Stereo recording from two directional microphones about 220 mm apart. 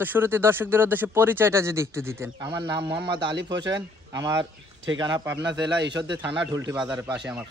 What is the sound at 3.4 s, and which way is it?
Speech, 55° right (ahead or behind).